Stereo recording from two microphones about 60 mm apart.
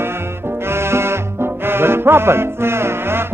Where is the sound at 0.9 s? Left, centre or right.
Right.